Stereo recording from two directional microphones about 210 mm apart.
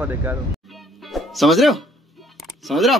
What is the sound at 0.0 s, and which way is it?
Speech, 10° right (ahead or behind).